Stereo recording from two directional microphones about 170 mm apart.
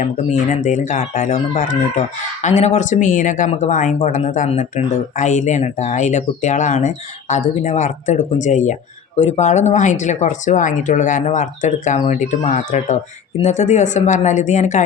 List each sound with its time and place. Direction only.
0.5 s speech: 45° left (ahead or behind)